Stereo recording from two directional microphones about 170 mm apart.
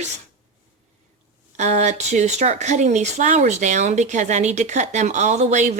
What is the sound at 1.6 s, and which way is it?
Speech, 45° right (ahead or behind).